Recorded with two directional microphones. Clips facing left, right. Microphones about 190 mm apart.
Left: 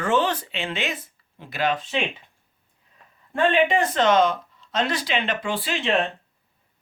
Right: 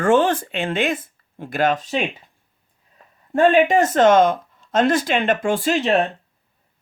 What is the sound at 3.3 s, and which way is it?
Speech, 45° right (ahead or behind).